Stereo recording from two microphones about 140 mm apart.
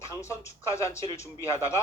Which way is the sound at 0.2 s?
20° left (ahead or behind).